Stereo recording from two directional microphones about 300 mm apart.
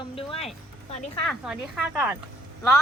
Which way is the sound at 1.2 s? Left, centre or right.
Centre.